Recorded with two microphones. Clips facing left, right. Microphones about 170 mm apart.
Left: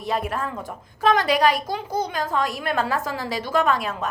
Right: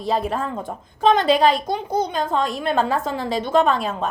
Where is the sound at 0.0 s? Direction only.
30° right (ahead or behind).